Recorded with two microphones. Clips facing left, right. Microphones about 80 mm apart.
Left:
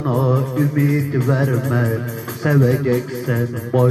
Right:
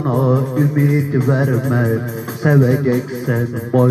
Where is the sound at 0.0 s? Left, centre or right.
Right.